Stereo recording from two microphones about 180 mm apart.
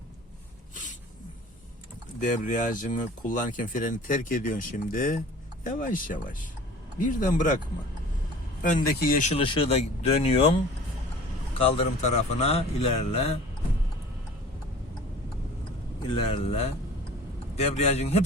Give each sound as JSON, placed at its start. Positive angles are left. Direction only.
{"t": 2.4, "sound": "speech", "side_deg": 45}
{"t": 8.6, "sound": "speech", "side_deg": 50}
{"t": 9.3, "sound": "speech", "side_deg": 30}
{"t": 11.6, "sound": "speech", "side_deg": 35}
{"t": 16.0, "sound": "speech", "side_deg": 30}